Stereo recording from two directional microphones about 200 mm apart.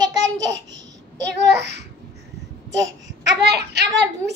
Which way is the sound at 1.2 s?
60° right (ahead or behind).